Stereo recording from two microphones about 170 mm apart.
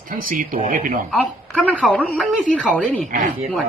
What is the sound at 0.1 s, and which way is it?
Speech, 55° right (ahead or behind).